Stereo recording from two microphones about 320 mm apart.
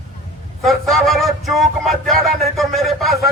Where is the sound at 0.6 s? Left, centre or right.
Centre.